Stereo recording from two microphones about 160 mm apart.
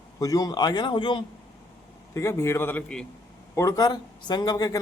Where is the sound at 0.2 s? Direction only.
20° left (ahead or behind).